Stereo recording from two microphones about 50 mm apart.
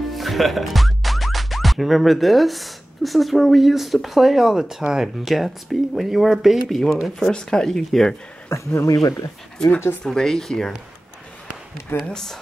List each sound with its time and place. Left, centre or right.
0.1 s speech: centre
5.2 s speech: centre
7.2 s speech: centre
8.5 s speech: left
10.0 s speech: centre
12.0 s speech: centre